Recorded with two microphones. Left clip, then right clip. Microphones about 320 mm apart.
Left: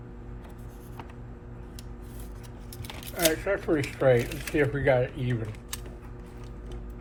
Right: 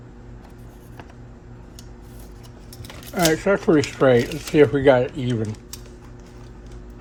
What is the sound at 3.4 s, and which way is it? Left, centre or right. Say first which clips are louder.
Speech: right 9 dB; right.